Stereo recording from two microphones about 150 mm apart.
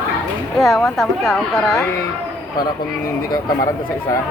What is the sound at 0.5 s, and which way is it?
A woman's voice, centre (ahead or behind).